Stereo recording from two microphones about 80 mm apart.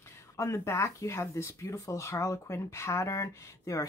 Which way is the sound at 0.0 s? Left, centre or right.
Left.